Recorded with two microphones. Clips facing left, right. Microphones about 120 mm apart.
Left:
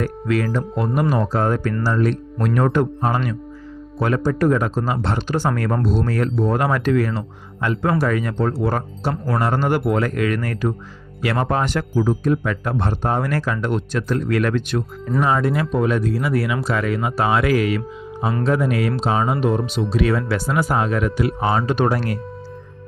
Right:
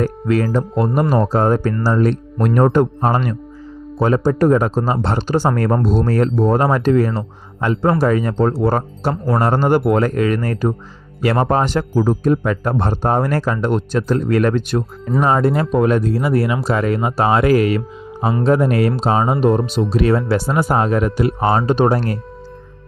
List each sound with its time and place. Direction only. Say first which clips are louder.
0.0 s speech: right 4 dB; 35° right (ahead or behind)
9.8 s speech: right 4 dB; 45° right (ahead or behind)
10.2 s speech: right 4 dB; 35° right (ahead or behind)
11.9 s speech: right 3 dB; 45° right (ahead or behind)
15.7 s speech: right 5 dB; 50° right (ahead or behind)
16.0 s speech: right 4 dB; 40° right (ahead or behind)